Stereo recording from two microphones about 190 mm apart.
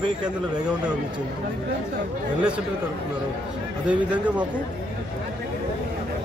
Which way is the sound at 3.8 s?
5° right (ahead or behind).